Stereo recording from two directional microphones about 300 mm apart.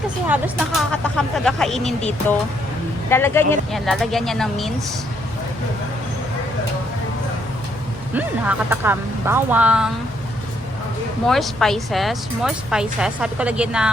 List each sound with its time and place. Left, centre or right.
0.3 s speech: centre
3.1 s speech: centre
8.1 s speech: centre
11.3 s speech: centre